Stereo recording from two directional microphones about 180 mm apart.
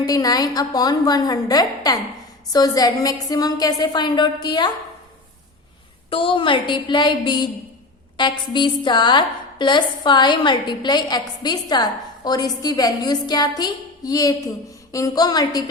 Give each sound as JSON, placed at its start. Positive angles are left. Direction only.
{"t": 0.0, "sound": "a woman's voice", "side_deg": 20}
{"t": 6.1, "sound": "a woman's voice", "side_deg": 30}